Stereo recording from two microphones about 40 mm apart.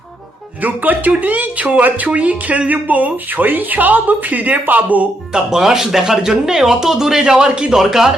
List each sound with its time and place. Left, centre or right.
0.6 s speech: right
5.3 s speech: centre
7.8 s speech: centre